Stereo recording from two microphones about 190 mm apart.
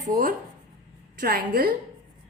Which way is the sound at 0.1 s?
50° right (ahead or behind).